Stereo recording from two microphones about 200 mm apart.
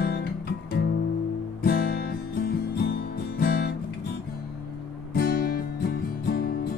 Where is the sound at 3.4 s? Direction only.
50° left (ahead or behind).